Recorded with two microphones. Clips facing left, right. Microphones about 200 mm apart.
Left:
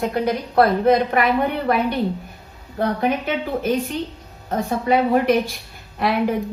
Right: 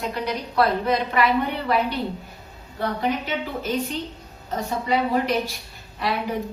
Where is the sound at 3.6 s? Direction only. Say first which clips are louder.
Left 4 dB; 50° left (ahead or behind).